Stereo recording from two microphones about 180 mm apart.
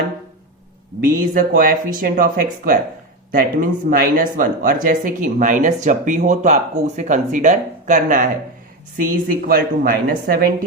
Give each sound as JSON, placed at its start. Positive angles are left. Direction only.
{"t": 1.1, "sound": "speech", "side_deg": -50}